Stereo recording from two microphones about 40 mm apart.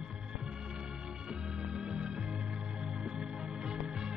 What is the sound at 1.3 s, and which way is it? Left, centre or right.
Music, right.